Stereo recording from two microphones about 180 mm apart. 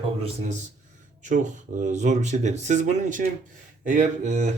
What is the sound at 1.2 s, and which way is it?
Speech, 45° right (ahead or behind).